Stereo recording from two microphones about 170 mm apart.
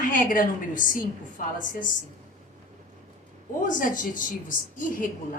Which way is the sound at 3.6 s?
50° left (ahead or behind).